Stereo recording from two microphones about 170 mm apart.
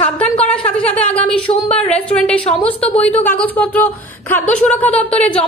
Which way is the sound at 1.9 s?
5° left (ahead or behind).